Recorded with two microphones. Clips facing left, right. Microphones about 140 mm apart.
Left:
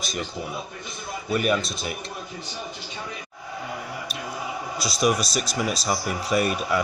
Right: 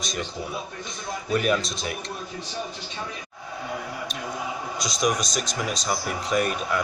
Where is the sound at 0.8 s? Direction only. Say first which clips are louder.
Left 1 dB; 5° left (ahead or behind).